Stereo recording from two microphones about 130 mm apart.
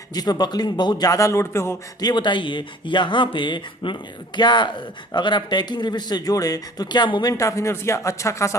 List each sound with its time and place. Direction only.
0.1 s speech: 30° left (ahead or behind)
2.0 s speech: 35° left (ahead or behind)